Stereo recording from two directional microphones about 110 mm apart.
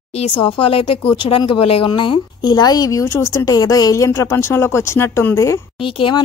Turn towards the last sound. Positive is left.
turn(degrees=50)  # may be behind; listen again after turning